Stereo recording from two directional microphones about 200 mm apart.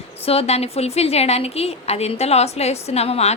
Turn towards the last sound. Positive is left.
turn(degrees=30)  # may be behind; listen again after turning